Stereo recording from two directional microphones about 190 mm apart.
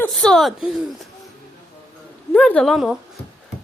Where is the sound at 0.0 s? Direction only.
Centre (ahead or behind).